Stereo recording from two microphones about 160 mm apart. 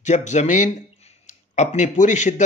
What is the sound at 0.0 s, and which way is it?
A man's voice, 45° left (ahead or behind).